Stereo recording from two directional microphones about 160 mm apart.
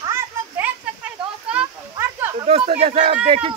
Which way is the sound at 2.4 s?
40° right (ahead or behind).